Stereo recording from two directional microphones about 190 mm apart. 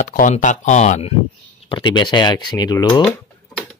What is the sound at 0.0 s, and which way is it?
Speech, 45° left (ahead or behind).